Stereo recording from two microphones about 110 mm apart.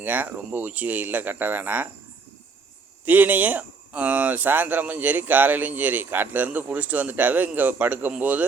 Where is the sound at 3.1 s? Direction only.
15° right (ahead or behind).